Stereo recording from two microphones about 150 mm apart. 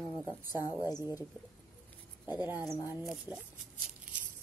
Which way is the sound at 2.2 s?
10° right (ahead or behind).